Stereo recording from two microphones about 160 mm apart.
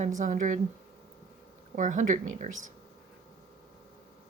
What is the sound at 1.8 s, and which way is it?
Speech, 50° right (ahead or behind).